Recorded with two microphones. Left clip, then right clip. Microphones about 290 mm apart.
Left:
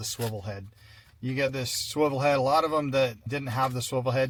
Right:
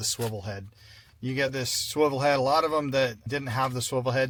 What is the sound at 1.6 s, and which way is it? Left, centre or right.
Speech, right.